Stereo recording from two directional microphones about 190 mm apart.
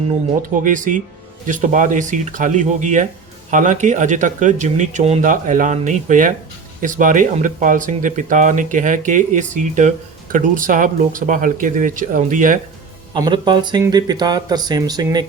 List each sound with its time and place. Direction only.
0.4 s speech: 45° right (ahead or behind)
13.1 s speech: 20° right (ahead or behind)